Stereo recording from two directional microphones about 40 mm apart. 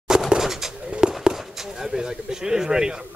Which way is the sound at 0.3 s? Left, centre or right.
Centre.